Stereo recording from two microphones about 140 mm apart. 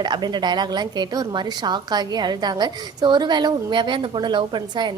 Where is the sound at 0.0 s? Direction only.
30° right (ahead or behind).